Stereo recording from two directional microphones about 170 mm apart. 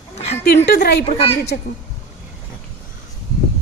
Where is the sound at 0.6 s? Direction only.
80° left.